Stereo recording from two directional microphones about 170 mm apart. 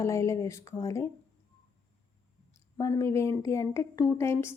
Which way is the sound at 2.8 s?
15° left (ahead or behind).